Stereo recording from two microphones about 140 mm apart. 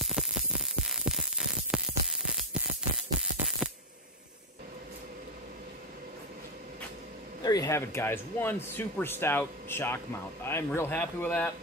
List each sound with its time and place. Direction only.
0.0 s a sound: centre (ahead or behind)
3.2 s music: centre (ahead or behind)
7.4 s a man's voice: 25° left (ahead or behind)